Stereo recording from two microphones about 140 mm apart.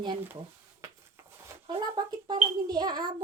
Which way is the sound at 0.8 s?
20° right (ahead or behind).